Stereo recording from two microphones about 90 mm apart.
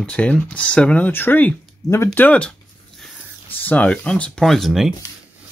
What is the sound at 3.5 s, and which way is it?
Speech, 20° left (ahead or behind).